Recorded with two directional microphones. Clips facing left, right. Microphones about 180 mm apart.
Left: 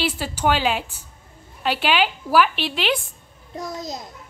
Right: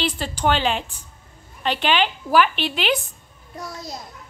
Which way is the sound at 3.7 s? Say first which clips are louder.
Left 4 dB; 20° left (ahead or behind).